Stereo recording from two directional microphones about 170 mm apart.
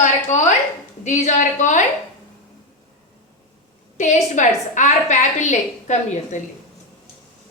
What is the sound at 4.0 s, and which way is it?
A woman's voice, 45° left (ahead or behind).